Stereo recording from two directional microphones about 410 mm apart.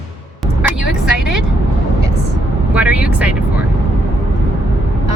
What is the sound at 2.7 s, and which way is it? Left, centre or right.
Vehicle, centre.